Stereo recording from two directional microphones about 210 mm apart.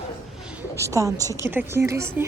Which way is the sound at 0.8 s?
15° right (ahead or behind).